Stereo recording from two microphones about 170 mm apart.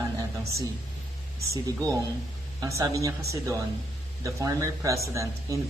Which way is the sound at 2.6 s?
20° right (ahead or behind).